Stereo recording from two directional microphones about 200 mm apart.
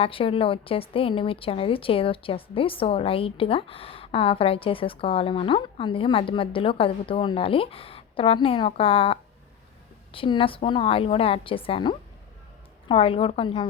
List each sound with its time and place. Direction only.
0.0 s a woman's voice: 25° left (ahead or behind)